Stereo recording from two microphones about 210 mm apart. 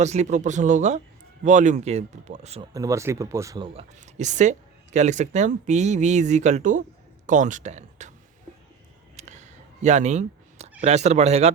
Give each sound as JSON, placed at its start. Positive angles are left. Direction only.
{"t": 0.0, "sound": "speech", "side_deg": -35}
{"t": 2.7, "sound": "speech", "side_deg": -15}
{"t": 3.8, "sound": "speech", "side_deg": -35}
{"t": 9.1, "sound": "a sound", "side_deg": -35}